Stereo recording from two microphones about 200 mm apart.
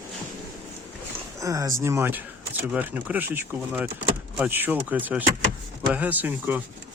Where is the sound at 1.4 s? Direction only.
15° right (ahead or behind).